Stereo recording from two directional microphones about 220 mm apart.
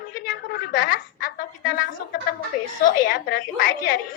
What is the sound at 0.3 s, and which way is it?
A man's voice, 40° left (ahead or behind).